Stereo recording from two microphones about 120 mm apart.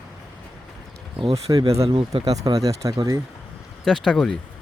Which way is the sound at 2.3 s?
30° right (ahead or behind).